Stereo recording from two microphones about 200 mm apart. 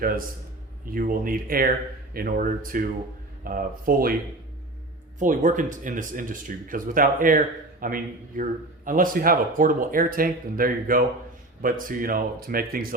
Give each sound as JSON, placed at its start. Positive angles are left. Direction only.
{"t": 0.0, "sound": "speech", "side_deg": -45}
{"t": 5.2, "sound": "speech", "side_deg": -40}